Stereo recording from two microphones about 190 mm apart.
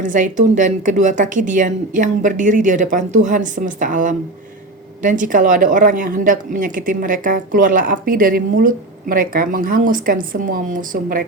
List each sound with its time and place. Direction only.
0.0 s a woman's voice: 40° right (ahead or behind)